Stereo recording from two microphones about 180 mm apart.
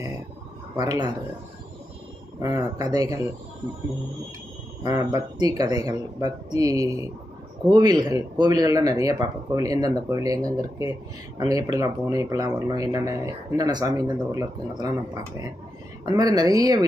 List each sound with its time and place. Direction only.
0.8 s speech: 20° right (ahead or behind)
2.4 s speech: 20° right (ahead or behind)
4.8 s speech: 20° right (ahead or behind)